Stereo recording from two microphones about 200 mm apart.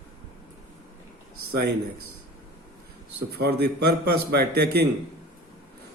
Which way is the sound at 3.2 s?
55° right (ahead or behind).